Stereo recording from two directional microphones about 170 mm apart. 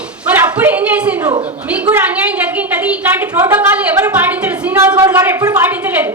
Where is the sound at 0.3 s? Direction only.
10° right (ahead or behind).